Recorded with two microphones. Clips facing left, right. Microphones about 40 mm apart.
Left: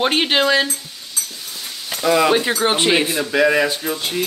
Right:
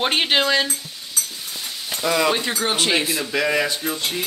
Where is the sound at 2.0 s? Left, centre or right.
Centre.